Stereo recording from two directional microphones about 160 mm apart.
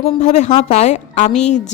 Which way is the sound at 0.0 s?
45° left (ahead or behind).